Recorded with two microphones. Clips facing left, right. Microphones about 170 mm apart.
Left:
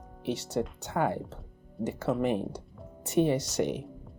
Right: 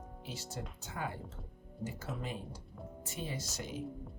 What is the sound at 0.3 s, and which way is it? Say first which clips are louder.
Speech: left 15 dB; 70° left (ahead or behind).